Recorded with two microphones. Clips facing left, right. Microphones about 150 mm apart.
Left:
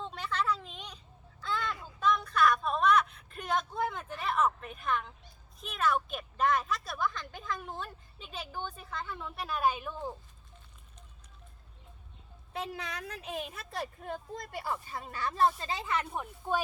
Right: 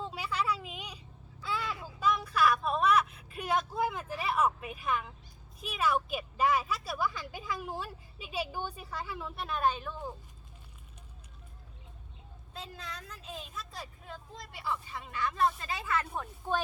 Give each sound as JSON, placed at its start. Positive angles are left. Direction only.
{"t": 0.0, "sound": "a sound", "side_deg": -10}
{"t": 5.5, "sound": "a woman's voice", "side_deg": -5}
{"t": 12.5, "sound": "a woman's voice", "side_deg": 70}